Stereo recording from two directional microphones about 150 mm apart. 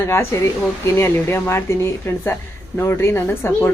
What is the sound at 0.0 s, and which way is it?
Speech, 15° left (ahead or behind).